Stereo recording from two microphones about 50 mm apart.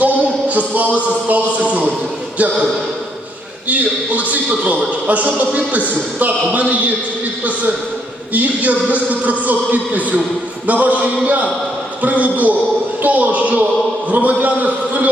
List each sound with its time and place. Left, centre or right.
0.0 s a sound: right
2.4 s a man's voice: right
3.7 s a man's voice: right
8.3 s a man's voice: right